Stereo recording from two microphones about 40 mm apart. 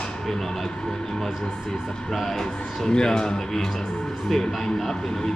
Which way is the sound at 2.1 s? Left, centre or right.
Centre.